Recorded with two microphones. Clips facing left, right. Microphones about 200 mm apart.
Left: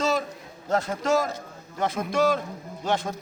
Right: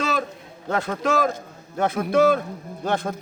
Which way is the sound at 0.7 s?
60° right (ahead or behind).